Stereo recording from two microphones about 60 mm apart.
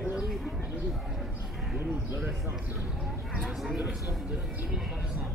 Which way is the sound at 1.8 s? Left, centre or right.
Right.